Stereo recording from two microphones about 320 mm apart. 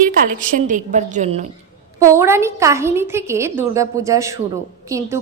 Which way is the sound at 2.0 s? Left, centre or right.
Centre.